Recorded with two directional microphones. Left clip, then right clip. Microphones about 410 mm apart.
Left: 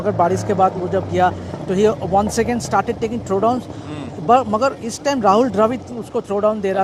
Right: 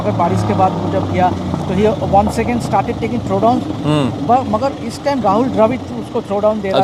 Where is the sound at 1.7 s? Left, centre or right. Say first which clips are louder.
Right 3 dB; left.